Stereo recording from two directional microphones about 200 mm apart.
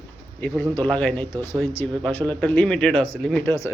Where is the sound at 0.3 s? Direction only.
10° left (ahead or behind).